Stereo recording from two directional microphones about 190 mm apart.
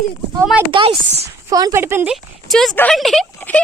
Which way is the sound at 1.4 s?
15° right (ahead or behind).